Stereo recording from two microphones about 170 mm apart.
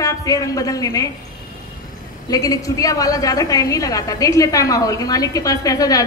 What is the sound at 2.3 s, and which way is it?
A woman's voice, 20° left (ahead or behind).